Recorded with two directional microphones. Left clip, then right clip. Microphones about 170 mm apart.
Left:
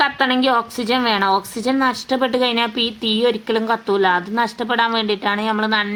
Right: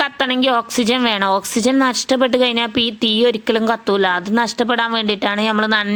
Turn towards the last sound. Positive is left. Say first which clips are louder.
# right 2 dB
turn(degrees=-40)  # may be behind; listen again after turning